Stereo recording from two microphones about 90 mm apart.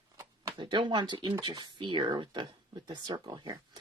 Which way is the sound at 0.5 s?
60° right (ahead or behind).